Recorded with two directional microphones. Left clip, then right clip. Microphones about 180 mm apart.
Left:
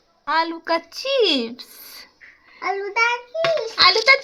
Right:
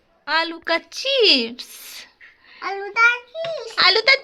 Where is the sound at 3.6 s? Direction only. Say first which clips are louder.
Right 1 dB; centre (ahead or behind).